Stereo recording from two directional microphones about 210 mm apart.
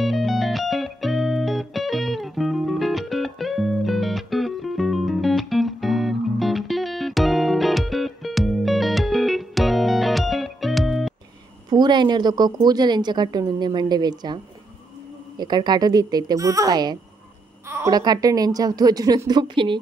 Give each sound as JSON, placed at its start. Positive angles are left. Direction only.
{"t": 0.0, "sound": "music", "side_deg": 0}
{"t": 11.7, "sound": "a woman's voice", "side_deg": -20}